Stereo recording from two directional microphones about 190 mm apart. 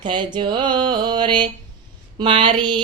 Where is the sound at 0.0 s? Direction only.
25° right (ahead or behind).